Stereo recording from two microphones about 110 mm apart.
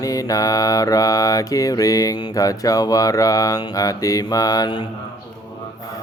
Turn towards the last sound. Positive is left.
turn(degrees=35)  # may be behind; listen again after turning